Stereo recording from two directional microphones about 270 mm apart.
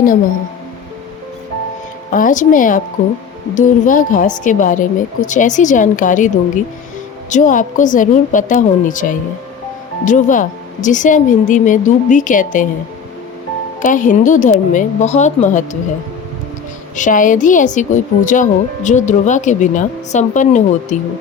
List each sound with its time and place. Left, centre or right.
2.1 s speech: left
13.8 s speech: left
17.0 s speech: left